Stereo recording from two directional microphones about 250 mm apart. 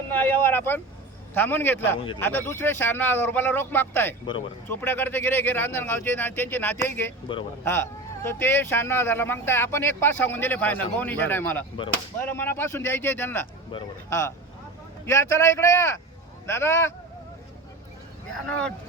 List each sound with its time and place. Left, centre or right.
0.1 s vehicle: centre
1.3 s speech: centre
7.3 s speech: centre
18.4 s speech: centre